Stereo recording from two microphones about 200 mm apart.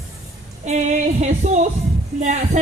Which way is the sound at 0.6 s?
35° right (ahead or behind).